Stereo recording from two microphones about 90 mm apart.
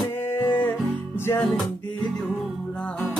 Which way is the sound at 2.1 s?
10° left (ahead or behind).